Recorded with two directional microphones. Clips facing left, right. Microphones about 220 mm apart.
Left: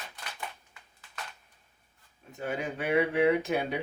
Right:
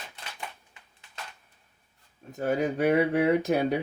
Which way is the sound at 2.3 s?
40° right (ahead or behind).